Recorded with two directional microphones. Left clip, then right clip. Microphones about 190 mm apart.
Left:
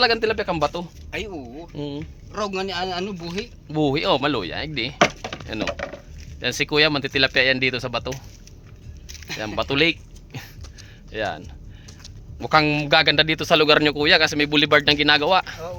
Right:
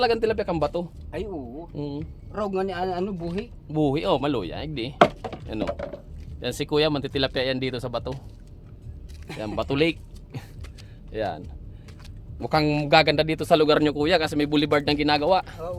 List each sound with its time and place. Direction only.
0.0 s a man's voice: 5° left (ahead or behind)
2.3 s speech: 40° right (ahead or behind)
3.7 s speech: 10° left (ahead or behind)
4.9 s a sound: 20° left (ahead or behind)
6.4 s speech: 10° left (ahead or behind)
9.6 s a sound: 5° left (ahead or behind)
11.1 s a man's voice: centre (ahead or behind)